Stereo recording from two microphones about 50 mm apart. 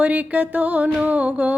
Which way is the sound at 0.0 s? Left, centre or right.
Right.